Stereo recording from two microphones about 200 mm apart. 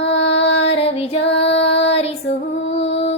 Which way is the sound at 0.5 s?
30° left (ahead or behind).